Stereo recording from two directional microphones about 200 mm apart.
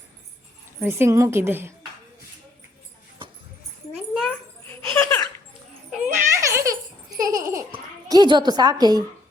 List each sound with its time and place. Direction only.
0.8 s a woman's voice: 10° right (ahead or behind)
3.9 s a sound: centre (ahead or behind)
4.7 s laughter: 10° left (ahead or behind)
6.3 s giggle: 15° right (ahead or behind)
7.2 s babbling: 15° right (ahead or behind)